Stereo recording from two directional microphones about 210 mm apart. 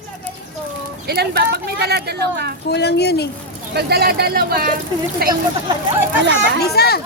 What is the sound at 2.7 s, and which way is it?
Speech, 50° left (ahead or behind).